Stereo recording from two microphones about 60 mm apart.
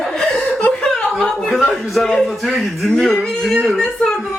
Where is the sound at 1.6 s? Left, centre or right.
Centre.